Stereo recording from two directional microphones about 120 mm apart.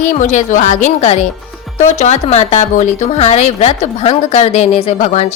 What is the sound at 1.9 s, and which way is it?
A woman's voice, 70° left (ahead or behind).